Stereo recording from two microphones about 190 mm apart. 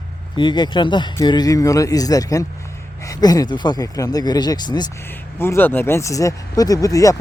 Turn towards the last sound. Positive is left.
turn(degrees=15)  # may be behind; listen again after turning